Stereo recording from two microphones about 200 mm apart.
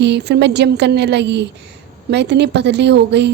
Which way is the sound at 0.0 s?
55° right (ahead or behind).